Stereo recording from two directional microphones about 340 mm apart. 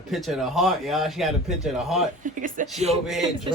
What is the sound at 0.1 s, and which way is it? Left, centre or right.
A man's voice, centre.